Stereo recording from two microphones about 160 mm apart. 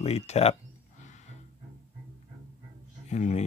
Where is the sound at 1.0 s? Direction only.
50° left (ahead or behind).